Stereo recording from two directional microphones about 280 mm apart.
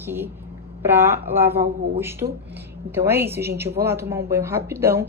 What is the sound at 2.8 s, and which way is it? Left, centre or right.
A woman's voice, centre.